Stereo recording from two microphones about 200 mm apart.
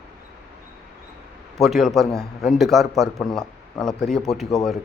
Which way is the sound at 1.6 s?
Centre (ahead or behind).